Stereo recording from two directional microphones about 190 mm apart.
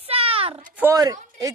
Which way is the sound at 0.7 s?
15° right (ahead or behind).